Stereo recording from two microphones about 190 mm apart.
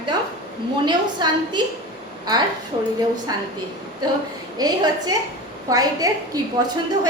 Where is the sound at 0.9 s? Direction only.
25° right (ahead or behind).